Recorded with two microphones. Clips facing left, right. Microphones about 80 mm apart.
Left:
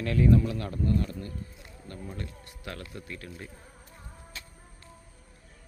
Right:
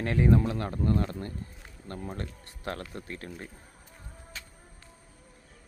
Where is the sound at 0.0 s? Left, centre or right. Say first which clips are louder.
Left 1 dB; right.